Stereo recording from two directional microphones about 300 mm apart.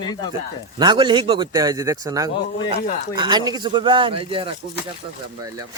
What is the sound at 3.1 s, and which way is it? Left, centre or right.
Speech, centre.